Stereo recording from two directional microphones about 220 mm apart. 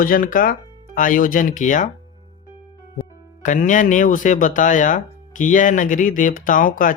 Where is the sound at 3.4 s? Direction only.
35° left (ahead or behind).